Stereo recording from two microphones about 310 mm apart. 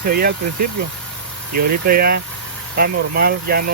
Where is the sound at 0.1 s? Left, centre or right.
Right.